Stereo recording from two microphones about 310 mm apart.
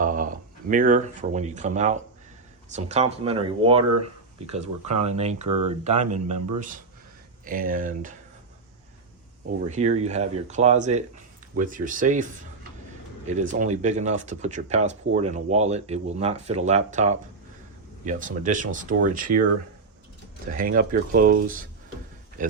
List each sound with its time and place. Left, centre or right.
0.0 s speech: right
5.5 s speech: right
5.8 s speech: right
9.6 s speech: right
20.6 s speech: right